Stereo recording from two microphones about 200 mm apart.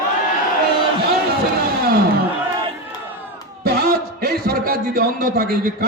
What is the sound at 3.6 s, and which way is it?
A man's voice, 50° right (ahead or behind).